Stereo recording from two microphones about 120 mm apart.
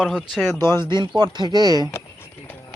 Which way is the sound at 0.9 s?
40° right (ahead or behind).